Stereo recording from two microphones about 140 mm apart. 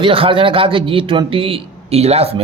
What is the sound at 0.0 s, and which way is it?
A man's voice, 40° right (ahead or behind).